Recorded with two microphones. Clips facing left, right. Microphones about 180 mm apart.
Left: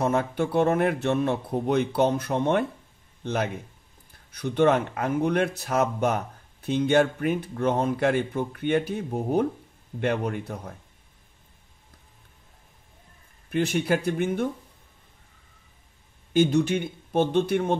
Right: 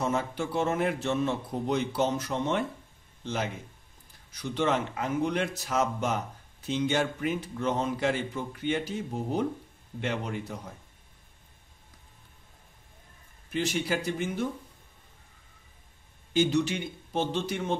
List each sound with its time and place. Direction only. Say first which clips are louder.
0.0 s a man's voice: left 5 dB; 60° left (ahead or behind)
13.5 s speech: left 5 dB; 55° left (ahead or behind)
16.3 s speech: left 4 dB; 55° left (ahead or behind)